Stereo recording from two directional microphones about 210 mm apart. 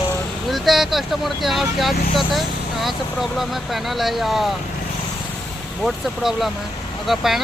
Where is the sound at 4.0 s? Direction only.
Centre (ahead or behind).